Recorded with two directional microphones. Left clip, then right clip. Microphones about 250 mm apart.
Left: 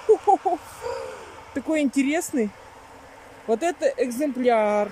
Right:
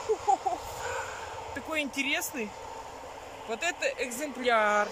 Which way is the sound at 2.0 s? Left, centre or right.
Left.